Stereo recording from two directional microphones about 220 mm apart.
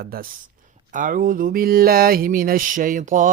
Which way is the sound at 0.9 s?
35° right (ahead or behind).